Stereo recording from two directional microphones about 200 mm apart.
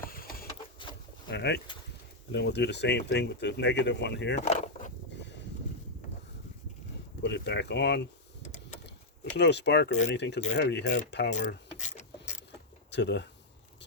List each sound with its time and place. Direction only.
0.0 s a sound: 45° left (ahead or behind)
1.3 s speech: 55° left (ahead or behind)
4.4 s a sound: 40° left (ahead or behind)
7.2 s speech: 60° left (ahead or behind)
9.3 s speech: 60° left (ahead or behind)
11.3 s speech: 40° left (ahead or behind)
11.8 s vehicle: 35° left (ahead or behind)
12.9 s speech: 60° left (ahead or behind)